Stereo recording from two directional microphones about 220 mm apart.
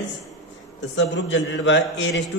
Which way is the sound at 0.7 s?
55° left (ahead or behind).